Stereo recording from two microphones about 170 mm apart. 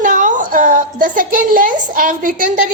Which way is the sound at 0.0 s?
50° right (ahead or behind).